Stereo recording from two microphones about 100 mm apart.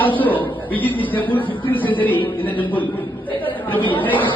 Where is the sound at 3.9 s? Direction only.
15° left (ahead or behind).